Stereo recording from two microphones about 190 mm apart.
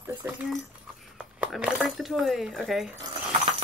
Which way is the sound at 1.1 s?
5° right (ahead or behind).